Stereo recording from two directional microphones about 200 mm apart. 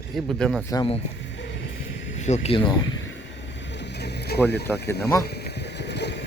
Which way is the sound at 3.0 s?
65° left (ahead or behind).